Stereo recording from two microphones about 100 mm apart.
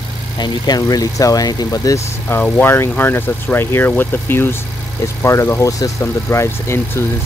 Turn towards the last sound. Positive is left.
turn(degrees=25)  # may be behind; listen again after turning